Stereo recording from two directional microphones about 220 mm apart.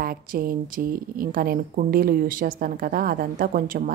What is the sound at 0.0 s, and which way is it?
A woman's voice, 40° right (ahead or behind).